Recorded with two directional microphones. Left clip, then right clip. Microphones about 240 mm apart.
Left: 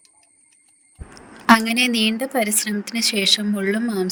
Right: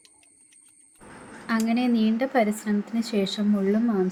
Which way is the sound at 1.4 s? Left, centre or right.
Left.